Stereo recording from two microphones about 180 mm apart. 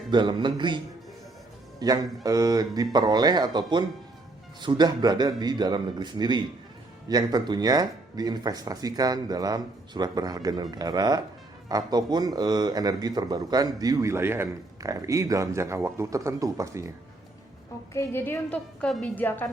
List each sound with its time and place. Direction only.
0.1 s a man's voice: 25° right (ahead or behind)
1.8 s a man's voice: 20° right (ahead or behind)
17.9 s a woman's voice: 15° left (ahead or behind)